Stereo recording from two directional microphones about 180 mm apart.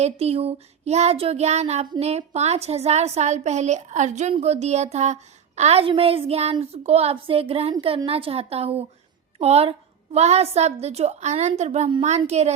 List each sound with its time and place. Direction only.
0.0 s child singing: 35° right (ahead or behind)